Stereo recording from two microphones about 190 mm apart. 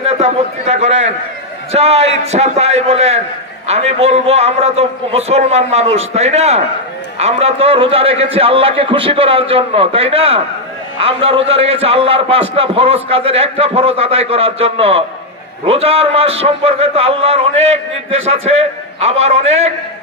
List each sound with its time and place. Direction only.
0.0 s a man's voice: 35° right (ahead or behind)